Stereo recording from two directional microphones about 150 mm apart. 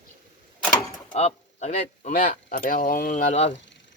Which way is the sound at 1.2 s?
50° left (ahead or behind).